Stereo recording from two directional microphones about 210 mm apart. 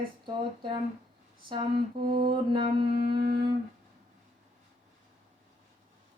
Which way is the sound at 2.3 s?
20° right (ahead or behind).